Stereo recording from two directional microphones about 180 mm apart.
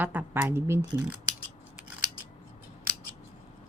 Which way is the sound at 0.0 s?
10° right (ahead or behind).